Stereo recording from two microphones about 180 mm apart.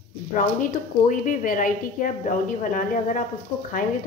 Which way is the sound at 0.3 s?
45° left (ahead or behind).